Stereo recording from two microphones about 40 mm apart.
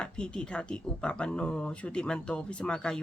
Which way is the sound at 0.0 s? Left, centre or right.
Left.